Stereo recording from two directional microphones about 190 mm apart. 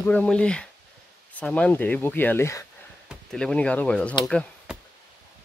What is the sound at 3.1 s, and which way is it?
Speech, 5° left (ahead or behind).